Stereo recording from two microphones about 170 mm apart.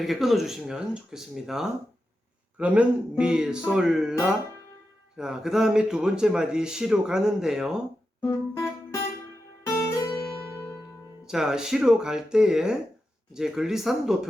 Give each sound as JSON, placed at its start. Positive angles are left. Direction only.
{"t": 0.0, "sound": "speech", "side_deg": 0}
{"t": 5.1, "sound": "speech", "side_deg": -5}
{"t": 8.2, "sound": "music", "side_deg": 15}
{"t": 11.3, "sound": "speech", "side_deg": -5}